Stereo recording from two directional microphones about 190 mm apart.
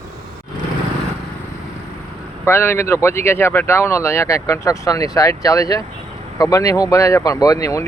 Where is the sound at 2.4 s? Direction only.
10° left (ahead or behind).